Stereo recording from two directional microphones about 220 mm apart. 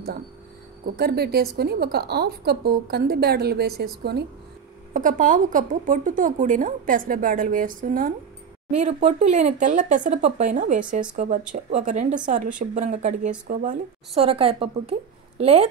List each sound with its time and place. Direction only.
0.9 s a woman's voice: 45° right (ahead or behind); by 15.7 s 30° right (ahead or behind)